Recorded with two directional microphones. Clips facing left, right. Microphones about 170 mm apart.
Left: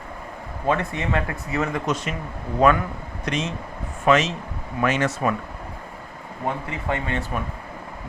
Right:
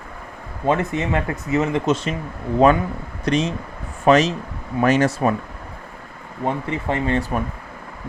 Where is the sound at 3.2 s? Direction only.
35° right (ahead or behind).